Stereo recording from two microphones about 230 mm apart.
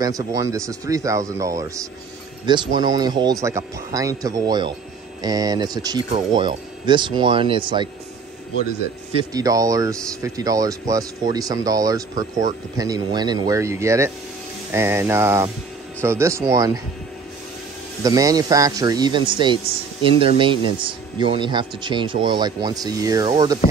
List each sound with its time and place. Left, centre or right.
0.0 s speech: centre
9.3 s speech: centre
18.0 s speech: centre